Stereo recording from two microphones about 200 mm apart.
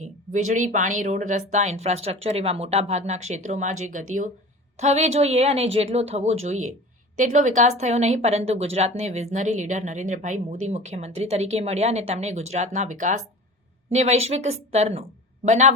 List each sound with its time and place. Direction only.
0.0 s speech: 40° right (ahead or behind)